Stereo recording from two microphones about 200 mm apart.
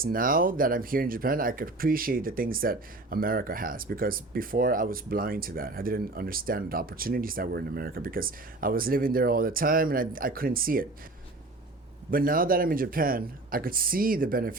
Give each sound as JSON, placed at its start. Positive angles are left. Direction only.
{"t": 0.0, "sound": "speech", "side_deg": -45}
{"t": 12.1, "sound": "speech", "side_deg": -45}